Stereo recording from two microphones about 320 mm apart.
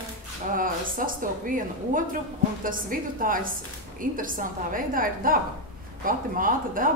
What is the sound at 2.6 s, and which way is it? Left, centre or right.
A woman's voice, right.